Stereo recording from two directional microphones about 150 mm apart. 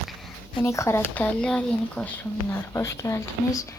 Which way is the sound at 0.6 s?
20° left (ahead or behind).